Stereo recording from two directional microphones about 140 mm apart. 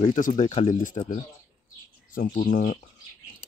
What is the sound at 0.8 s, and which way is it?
Speech, 50° left (ahead or behind).